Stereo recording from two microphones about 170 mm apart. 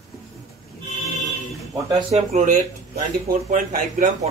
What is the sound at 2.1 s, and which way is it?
Speech, 40° right (ahead or behind).